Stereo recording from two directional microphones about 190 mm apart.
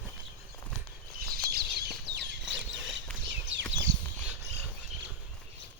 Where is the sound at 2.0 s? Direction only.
65° right (ahead or behind).